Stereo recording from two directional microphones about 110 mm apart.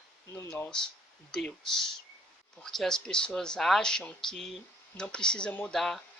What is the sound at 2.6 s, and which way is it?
Speech, 5° left (ahead or behind).